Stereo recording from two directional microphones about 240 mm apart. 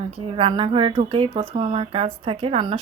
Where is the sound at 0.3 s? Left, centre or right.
Right.